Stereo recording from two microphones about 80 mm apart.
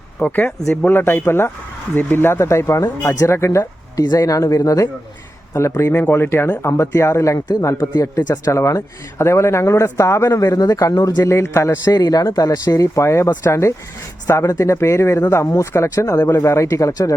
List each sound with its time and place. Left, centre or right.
0.2 s speech: left
0.9 s a man's voice: left
4.0 s a man's voice: left
10.4 s a man's voice: left
11.9 s a man's voice: left